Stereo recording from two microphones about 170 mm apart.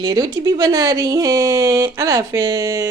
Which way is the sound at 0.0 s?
25° right (ahead or behind).